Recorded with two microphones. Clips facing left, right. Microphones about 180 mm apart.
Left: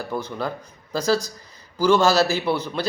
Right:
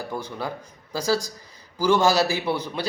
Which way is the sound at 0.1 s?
10° right (ahead or behind).